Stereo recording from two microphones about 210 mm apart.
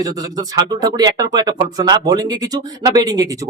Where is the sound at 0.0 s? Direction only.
20° right (ahead or behind).